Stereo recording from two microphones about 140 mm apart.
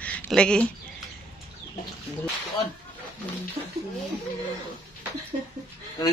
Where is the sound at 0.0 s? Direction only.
10° left (ahead or behind).